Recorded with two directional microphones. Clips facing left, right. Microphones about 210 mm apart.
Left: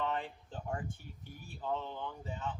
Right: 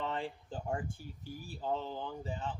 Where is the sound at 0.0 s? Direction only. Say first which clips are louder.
Left 1 dB; 30° right (ahead or behind).